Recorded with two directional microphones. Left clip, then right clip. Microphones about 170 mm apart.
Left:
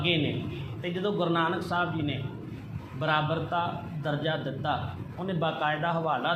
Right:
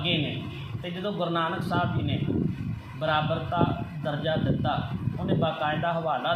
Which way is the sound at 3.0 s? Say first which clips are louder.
Right 1 dB; 25° right (ahead or behind).